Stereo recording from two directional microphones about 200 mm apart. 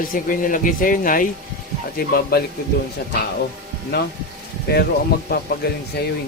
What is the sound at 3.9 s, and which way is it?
A man's voice, 55° left (ahead or behind).